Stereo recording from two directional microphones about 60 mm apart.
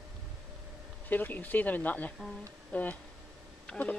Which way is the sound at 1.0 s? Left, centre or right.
Left.